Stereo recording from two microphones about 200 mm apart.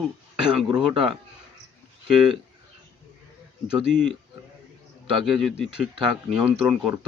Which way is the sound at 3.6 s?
5° right (ahead or behind).